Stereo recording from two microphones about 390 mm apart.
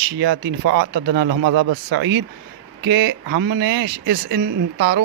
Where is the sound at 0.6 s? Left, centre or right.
Right.